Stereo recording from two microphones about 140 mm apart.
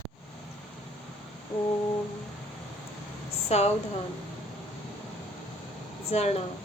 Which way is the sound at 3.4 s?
50° left (ahead or behind).